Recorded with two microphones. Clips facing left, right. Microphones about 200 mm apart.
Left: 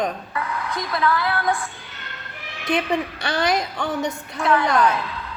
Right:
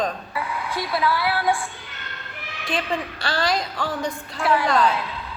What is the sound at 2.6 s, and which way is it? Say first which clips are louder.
A woman's voice: left 4 dB; 20° left (ahead or behind).